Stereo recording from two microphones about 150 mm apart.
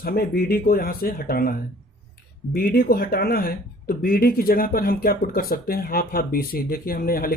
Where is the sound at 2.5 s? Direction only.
85° left.